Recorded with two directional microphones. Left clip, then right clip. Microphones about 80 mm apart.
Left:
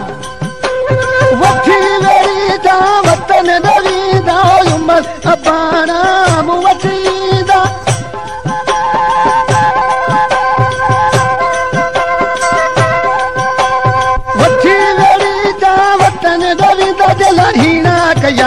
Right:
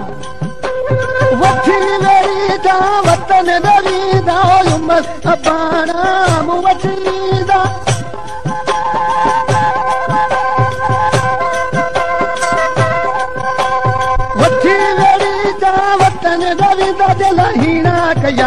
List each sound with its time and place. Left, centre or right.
1.1 s music: left
8.6 s music: left